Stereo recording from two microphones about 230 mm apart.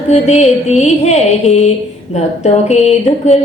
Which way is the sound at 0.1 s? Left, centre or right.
Left.